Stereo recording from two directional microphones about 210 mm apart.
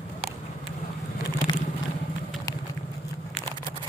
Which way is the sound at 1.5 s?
20° left (ahead or behind).